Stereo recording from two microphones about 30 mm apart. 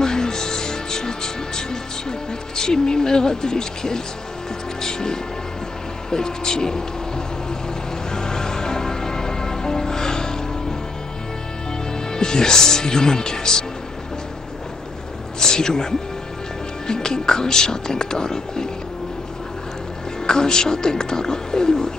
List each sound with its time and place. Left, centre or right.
0.0 s music: left
6.0 s speech: left
8.1 s music: left
12.1 s speech: left
15.4 s speech: left
20.2 s speech: left